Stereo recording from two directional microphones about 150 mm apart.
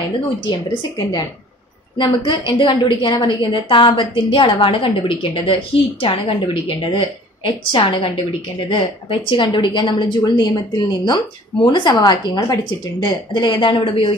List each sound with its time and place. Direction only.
0.5 s a woman's voice: 30° left (ahead or behind)